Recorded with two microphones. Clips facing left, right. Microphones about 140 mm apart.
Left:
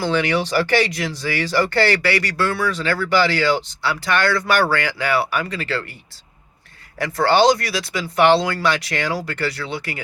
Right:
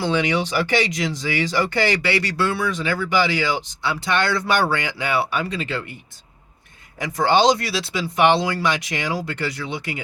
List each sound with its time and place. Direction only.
0.0 s speech: 20° right (ahead or behind)
7.0 s speech: 15° right (ahead or behind)